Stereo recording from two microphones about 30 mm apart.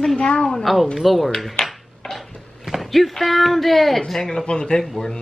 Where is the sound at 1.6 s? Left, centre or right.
Left.